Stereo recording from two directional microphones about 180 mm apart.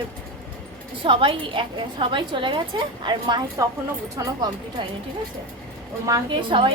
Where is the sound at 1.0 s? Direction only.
30° right (ahead or behind).